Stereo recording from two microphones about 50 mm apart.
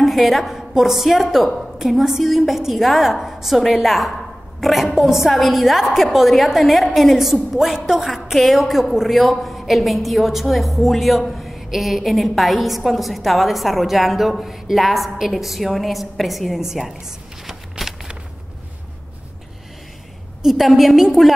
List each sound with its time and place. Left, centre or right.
0.0 s a woman's voice: centre
20.4 s a woman's voice: centre